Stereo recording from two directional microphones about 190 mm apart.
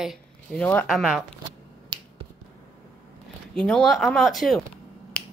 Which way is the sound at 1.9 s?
25° right (ahead or behind).